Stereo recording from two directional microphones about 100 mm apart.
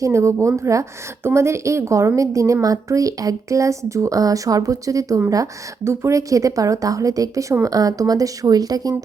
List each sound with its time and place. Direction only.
0.0 s a woman's voice: 30° right (ahead or behind)